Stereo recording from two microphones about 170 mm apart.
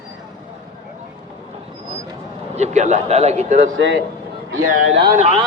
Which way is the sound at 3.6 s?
90° right.